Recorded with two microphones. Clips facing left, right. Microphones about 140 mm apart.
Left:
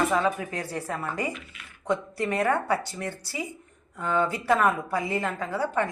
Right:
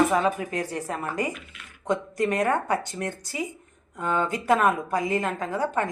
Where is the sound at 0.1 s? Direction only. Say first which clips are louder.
Right 2 dB; 15° right (ahead or behind).